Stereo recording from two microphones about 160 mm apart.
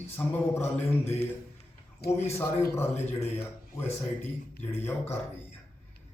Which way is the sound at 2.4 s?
15° left (ahead or behind).